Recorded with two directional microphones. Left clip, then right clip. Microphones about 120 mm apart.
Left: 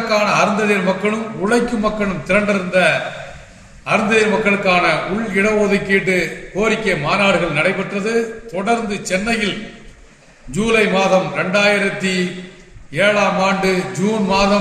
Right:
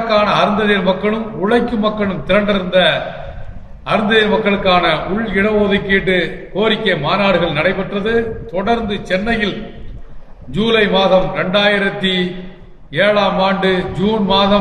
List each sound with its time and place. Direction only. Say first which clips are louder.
0.2 s a man's voice: right 2 dB; 10° left (ahead or behind)
10.5 s a man's voice: right 2 dB; 10° left (ahead or behind)